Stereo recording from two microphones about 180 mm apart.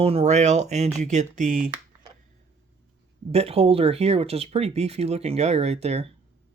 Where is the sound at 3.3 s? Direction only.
35° right (ahead or behind).